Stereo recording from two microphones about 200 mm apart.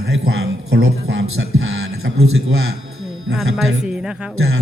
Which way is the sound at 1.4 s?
60° right (ahead or behind).